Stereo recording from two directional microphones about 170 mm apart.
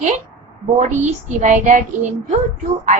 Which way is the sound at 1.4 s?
45° right (ahead or behind).